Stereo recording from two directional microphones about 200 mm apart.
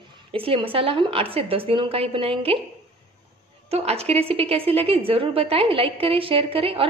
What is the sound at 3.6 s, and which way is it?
A woman's voice, 30° right (ahead or behind).